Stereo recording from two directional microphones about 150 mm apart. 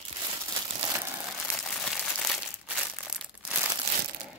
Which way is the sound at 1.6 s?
5° left (ahead or behind).